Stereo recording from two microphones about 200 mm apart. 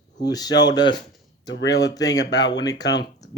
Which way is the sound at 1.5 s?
55° left (ahead or behind).